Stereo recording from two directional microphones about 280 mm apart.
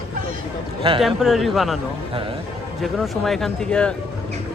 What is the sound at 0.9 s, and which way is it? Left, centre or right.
Speech, centre.